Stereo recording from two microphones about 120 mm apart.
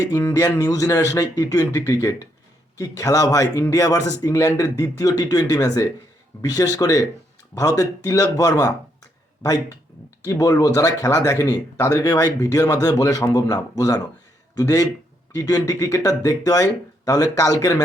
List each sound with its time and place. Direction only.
0.1 s speech: 20° left (ahead or behind)
10.2 s speech: 30° left (ahead or behind)